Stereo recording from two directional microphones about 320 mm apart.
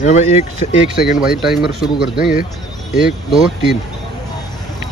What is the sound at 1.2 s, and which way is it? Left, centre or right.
Speech, centre.